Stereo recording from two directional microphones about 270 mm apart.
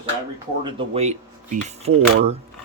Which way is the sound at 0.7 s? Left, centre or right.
Centre.